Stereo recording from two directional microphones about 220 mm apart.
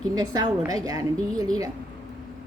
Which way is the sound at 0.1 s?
20° right (ahead or behind).